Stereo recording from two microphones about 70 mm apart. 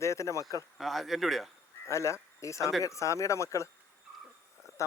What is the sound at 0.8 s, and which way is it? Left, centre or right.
Speech, centre.